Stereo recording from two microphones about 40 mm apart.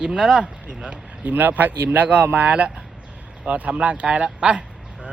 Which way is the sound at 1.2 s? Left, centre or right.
Right.